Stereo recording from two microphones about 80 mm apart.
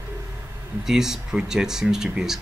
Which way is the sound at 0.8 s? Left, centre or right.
Centre.